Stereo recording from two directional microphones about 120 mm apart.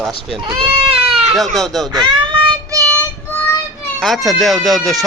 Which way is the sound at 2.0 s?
45° right (ahead or behind).